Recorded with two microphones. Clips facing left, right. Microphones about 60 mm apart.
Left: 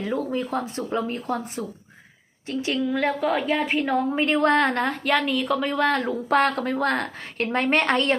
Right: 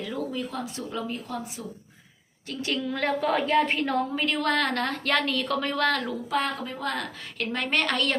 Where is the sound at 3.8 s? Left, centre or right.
Centre.